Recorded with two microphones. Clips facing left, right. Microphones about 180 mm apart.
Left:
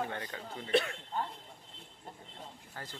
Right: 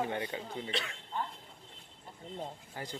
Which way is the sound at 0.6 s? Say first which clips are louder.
Left 9 dB; 50° left (ahead or behind).